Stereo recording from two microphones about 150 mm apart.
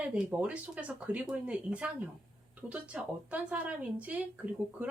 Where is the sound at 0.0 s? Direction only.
10° right (ahead or behind).